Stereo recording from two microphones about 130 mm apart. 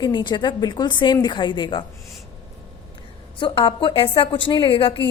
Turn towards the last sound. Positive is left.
turn(degrees=40)  # may be behind; listen again after turning